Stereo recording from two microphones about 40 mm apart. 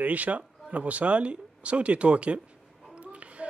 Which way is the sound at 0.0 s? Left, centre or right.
Right.